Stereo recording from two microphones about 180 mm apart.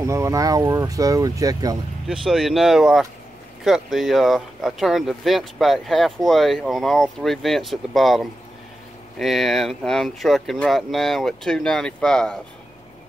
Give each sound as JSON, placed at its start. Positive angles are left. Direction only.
{"t": 0.0, "sound": "speech", "side_deg": -15}
{"t": 2.0, "sound": "speech", "side_deg": 0}